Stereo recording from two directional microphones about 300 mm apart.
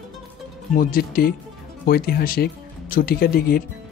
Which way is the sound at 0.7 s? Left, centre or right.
Left.